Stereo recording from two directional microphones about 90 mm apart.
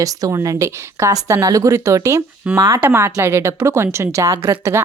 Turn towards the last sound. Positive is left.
turn(degrees=-30)  # may be behind; listen again after turning